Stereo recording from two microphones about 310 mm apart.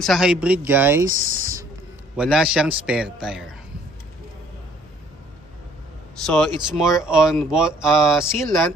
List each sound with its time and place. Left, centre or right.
0.0 s speech: centre
1.2 s a sound: right
2.1 s speech: centre
6.2 s speech: centre